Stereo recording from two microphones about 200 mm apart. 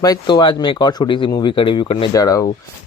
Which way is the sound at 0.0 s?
20° left (ahead or behind).